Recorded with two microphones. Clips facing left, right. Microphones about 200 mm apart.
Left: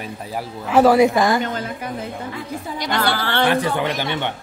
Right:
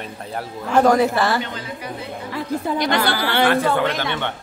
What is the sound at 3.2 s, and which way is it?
Speech, 10° right (ahead or behind).